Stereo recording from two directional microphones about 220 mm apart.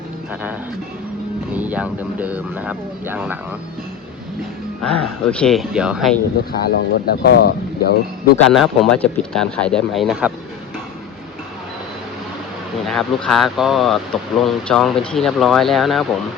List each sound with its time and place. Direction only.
1.5 s speech: 5° right (ahead or behind)
4.8 s speech: 5° left (ahead or behind)
6.7 s speech: 45° left (ahead or behind)
8.4 s speech: centre (ahead or behind)
12.8 s speech: centre (ahead or behind)